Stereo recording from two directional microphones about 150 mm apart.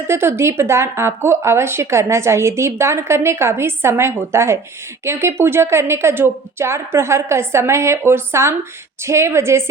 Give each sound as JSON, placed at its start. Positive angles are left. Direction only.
{"t": 0.1, "sound": "speech", "side_deg": -15}